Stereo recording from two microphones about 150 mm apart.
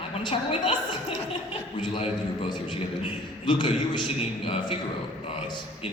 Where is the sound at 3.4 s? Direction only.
30° left (ahead or behind).